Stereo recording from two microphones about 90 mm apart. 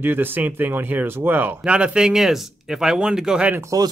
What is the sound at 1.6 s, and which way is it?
Speech, 10° right (ahead or behind).